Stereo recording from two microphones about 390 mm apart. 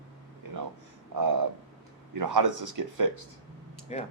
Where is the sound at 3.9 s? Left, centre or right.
Centre.